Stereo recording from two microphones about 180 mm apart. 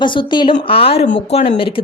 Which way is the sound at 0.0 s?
25° left (ahead or behind).